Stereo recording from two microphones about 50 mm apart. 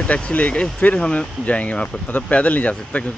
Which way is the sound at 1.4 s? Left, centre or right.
Left.